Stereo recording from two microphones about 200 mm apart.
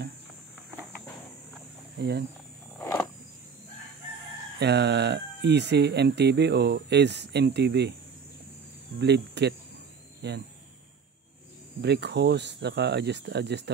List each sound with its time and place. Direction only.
2.0 s speech: 55° right (ahead or behind)
2.8 s vehicle: 10° left (ahead or behind)
4.6 s speech: 55° right (ahead or behind)
9.0 s speech: 60° right (ahead or behind)
11.8 s speech: 55° right (ahead or behind)